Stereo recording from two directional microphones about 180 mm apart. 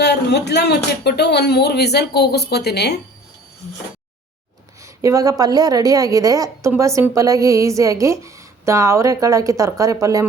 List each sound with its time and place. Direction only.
0.0 s speech: 70° left (ahead or behind)
4.8 s a woman's voice: 15° right (ahead or behind)